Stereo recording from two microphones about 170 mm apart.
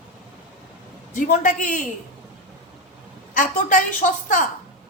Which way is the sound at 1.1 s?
50° left (ahead or behind).